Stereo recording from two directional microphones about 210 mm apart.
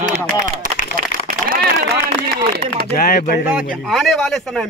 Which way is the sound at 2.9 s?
45° left (ahead or behind).